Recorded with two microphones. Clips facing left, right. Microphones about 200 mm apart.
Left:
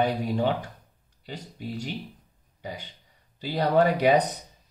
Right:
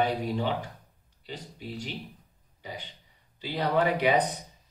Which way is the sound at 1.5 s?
45° left (ahead or behind).